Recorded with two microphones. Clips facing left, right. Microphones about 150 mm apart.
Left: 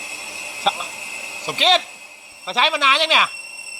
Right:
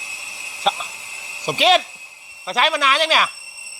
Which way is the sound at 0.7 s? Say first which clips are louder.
Right 1 dB; centre (ahead or behind).